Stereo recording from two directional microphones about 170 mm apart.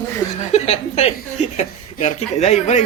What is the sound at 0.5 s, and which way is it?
Speech, 35° left (ahead or behind).